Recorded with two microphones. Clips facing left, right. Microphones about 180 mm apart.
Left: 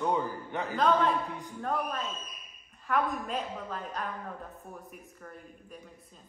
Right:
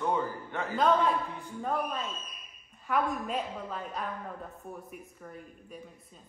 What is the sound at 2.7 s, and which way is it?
A woman's voice, centre (ahead or behind).